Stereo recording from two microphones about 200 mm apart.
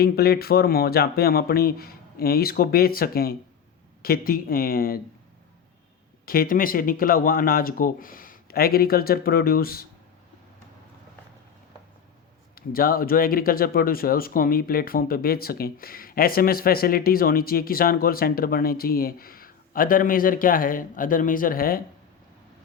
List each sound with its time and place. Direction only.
0.0 s speech: 50° left (ahead or behind)
6.2 s speech: 45° left (ahead or behind)
12.5 s speech: 45° left (ahead or behind)